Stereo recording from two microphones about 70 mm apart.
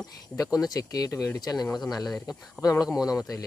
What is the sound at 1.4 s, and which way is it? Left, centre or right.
Speech, left.